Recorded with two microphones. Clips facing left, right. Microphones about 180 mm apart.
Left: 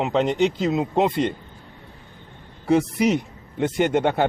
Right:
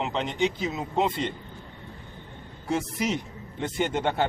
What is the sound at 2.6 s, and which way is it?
A man's voice, 65° left (ahead or behind).